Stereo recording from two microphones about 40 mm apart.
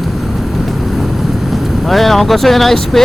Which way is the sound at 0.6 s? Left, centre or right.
Centre.